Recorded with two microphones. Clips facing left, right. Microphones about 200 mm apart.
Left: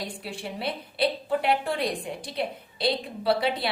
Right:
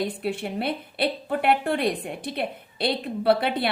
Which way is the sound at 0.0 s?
55° right (ahead or behind).